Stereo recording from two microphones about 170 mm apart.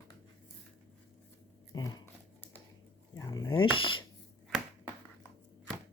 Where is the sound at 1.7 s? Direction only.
20° left (ahead or behind).